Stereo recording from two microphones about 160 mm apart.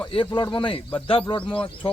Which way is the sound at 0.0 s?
30° left (ahead or behind).